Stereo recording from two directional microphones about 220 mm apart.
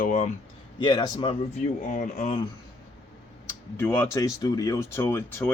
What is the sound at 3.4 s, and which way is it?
Speech, 10° left (ahead or behind).